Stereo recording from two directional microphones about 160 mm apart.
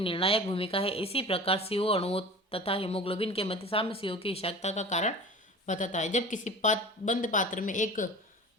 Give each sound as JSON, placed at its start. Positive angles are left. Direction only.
{"t": 0.0, "sound": "a woman's voice", "side_deg": 35}